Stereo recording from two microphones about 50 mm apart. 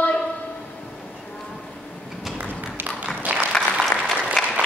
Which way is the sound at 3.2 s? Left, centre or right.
Right.